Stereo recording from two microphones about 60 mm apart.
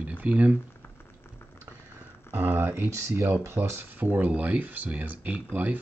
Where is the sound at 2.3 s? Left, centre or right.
Right.